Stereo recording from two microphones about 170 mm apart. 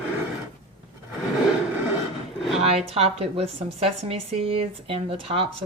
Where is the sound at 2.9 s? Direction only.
35° right (ahead or behind).